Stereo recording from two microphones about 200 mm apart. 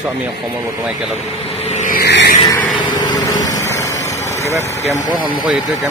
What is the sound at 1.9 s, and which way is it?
Vehicle, 55° left (ahead or behind).